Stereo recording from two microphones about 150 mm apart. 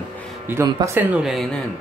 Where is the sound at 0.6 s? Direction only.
25° right (ahead or behind).